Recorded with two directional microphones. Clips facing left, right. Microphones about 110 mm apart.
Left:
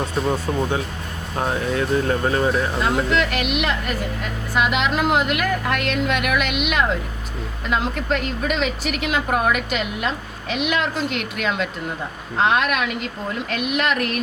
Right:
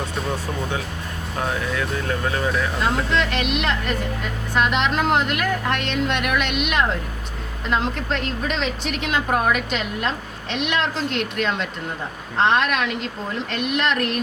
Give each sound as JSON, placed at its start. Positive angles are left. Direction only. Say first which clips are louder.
{"t": 1.4, "sound": "speech", "louder": "left 3 dB", "side_deg": 35}
{"t": 2.8, "sound": "a woman's voice", "louder": "left 1 dB", "side_deg": 5}